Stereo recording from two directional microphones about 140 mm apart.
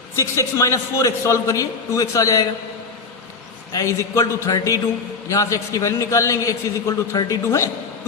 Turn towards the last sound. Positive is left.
turn(degrees=20)  # may be behind; listen again after turning